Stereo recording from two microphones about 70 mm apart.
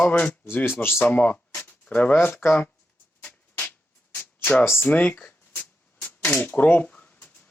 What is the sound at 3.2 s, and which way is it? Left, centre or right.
Music, left.